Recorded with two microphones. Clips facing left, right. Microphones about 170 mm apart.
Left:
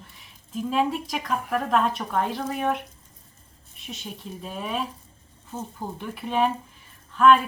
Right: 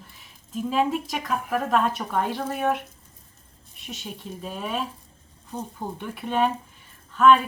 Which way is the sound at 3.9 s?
Centre (ahead or behind).